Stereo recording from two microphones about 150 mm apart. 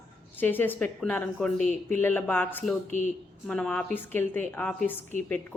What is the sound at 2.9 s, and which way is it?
Speech, 55° left (ahead or behind).